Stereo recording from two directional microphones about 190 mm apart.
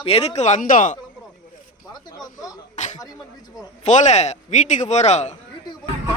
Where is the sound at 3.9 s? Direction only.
40° left (ahead or behind).